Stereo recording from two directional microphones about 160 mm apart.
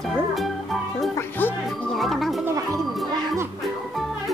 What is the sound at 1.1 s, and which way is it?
Music, 15° left (ahead or behind).